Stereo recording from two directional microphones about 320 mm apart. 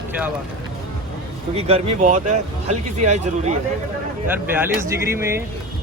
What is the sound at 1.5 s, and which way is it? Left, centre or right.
Speech, centre.